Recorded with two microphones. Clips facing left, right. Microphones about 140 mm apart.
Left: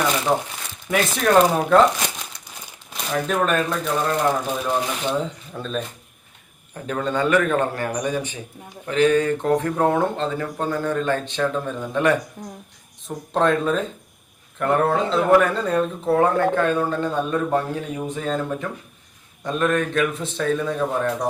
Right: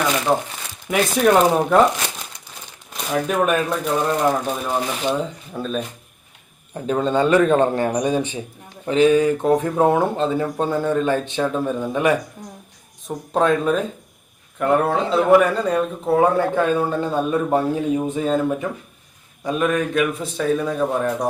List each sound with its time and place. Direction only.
0.3 s speech: 15° right (ahead or behind)
3.1 s speech: 10° right (ahead or behind)
5.2 s speech: 5° right (ahead or behind)
6.8 s a man's voice: 20° right (ahead or behind); by 16.2 s centre (ahead or behind)
16.2 s speech: 15° right (ahead or behind)